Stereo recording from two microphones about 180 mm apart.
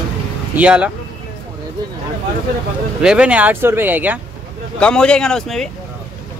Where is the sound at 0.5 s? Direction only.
5° right (ahead or behind).